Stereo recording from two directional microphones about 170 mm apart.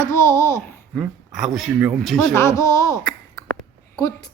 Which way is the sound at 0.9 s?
Centre (ahead or behind).